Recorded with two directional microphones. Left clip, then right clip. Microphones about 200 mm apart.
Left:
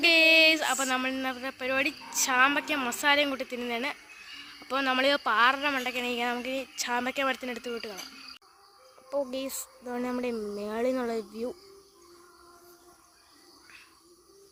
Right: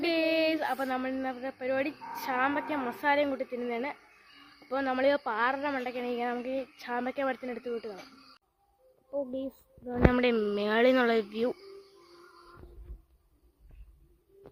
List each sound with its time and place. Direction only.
0.0 s a woman's voice: 20° left (ahead or behind)
9.9 s speech: 5° left (ahead or behind)